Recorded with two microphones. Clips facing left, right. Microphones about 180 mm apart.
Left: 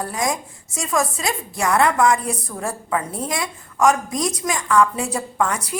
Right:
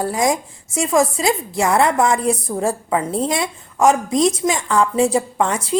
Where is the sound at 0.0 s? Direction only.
25° right (ahead or behind).